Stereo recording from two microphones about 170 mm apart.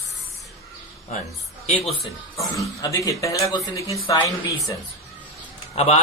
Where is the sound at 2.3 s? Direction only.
20° left (ahead or behind).